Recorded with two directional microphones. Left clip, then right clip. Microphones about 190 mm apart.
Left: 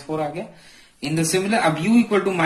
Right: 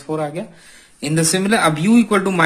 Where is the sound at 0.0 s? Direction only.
40° right (ahead or behind).